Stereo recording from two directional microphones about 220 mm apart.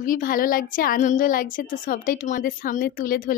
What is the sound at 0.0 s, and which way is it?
A woman's voice, 40° left (ahead or behind).